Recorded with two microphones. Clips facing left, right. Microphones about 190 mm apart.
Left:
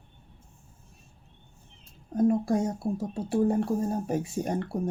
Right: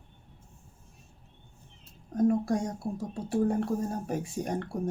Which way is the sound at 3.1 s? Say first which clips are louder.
Left 2 dB; 25° left (ahead or behind).